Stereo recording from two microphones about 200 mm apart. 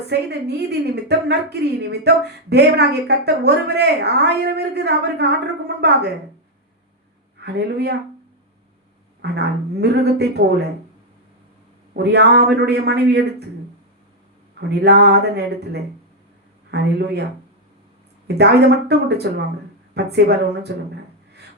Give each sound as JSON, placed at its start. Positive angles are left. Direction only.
{"t": 0.1, "sound": "a woman's voice", "side_deg": -55}
{"t": 7.3, "sound": "speech", "side_deg": -55}
{"t": 9.2, "sound": "a woman's voice", "side_deg": -55}
{"t": 12.0, "sound": "a woman's voice", "side_deg": -55}
{"t": 14.6, "sound": "a woman's voice", "side_deg": -55}
{"t": 18.3, "sound": "a woman's voice", "side_deg": -55}